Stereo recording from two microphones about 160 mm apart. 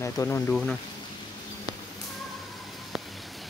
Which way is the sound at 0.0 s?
15° left (ahead or behind).